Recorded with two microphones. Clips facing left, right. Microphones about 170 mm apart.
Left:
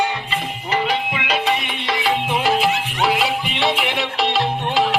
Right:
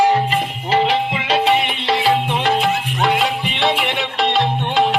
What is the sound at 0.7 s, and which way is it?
Music, 30° right (ahead or behind).